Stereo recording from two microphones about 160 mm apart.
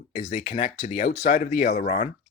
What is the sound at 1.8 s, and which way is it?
Speech, 45° left (ahead or behind).